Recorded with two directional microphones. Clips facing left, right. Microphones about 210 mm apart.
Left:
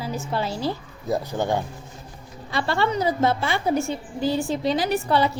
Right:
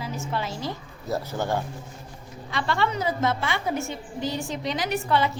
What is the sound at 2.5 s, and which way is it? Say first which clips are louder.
A woman's voice: left 3 dB; 35° left (ahead or behind).